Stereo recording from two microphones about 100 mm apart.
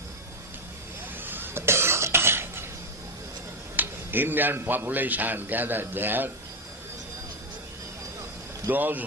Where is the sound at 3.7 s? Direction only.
20° right (ahead or behind).